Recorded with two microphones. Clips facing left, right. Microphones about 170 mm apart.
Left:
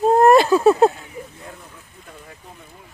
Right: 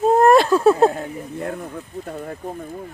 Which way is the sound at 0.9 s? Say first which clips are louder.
Right 8 dB; 55° right (ahead or behind).